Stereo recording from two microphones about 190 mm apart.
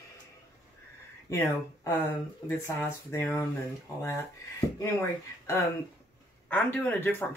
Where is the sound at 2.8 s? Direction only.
10° left (ahead or behind).